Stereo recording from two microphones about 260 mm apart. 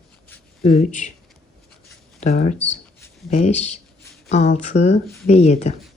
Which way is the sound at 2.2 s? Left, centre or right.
Left.